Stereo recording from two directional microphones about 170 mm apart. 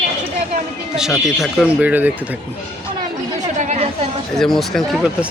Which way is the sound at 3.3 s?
45° right (ahead or behind).